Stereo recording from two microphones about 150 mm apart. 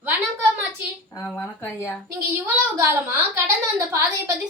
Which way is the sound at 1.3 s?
15° left (ahead or behind).